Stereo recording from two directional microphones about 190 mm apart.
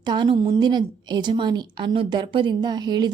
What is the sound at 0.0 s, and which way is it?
A woman's voice, 25° right (ahead or behind).